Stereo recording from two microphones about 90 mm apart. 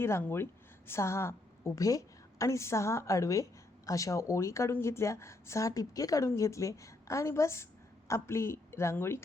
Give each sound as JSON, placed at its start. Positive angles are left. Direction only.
{"t": 0.0, "sound": "a woman's voice", "side_deg": 25}